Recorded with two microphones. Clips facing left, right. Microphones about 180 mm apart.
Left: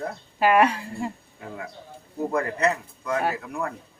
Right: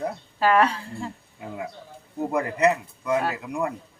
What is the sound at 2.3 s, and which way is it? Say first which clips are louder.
Speech: right 3 dB; 15° right (ahead or behind).